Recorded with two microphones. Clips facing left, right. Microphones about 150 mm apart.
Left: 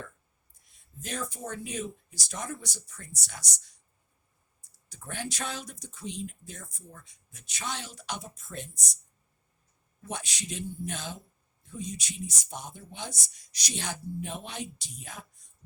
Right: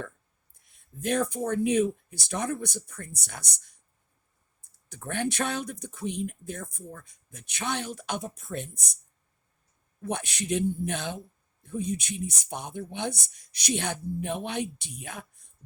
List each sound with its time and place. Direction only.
0.6 s speech: 55° right (ahead or behind)
4.9 s speech: 60° right (ahead or behind)
10.0 s speech: 60° right (ahead or behind)